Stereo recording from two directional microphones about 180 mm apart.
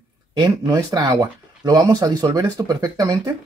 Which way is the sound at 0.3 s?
20° right (ahead or behind).